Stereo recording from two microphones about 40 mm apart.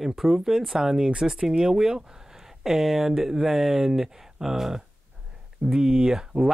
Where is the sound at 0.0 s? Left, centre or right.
Centre.